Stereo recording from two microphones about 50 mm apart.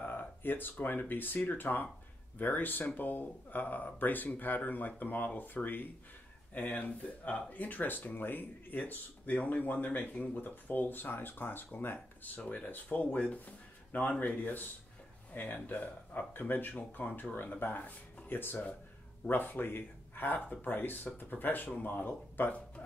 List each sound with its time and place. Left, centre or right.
0.0 s speech: left